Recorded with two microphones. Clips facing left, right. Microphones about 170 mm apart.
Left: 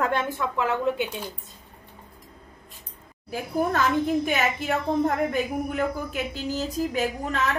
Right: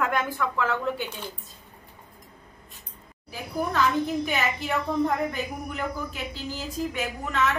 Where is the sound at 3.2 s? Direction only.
50° left (ahead or behind).